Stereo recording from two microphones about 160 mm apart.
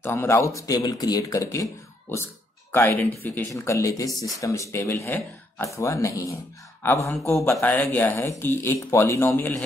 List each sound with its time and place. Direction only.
0.0 s speech: 15° left (ahead or behind)